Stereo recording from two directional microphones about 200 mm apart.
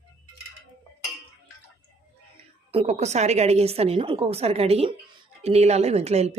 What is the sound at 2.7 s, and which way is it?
A woman's voice, 30° right (ahead or behind).